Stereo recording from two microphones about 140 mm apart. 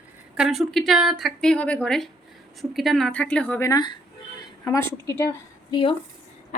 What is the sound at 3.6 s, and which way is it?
Speech, 25° left (ahead or behind).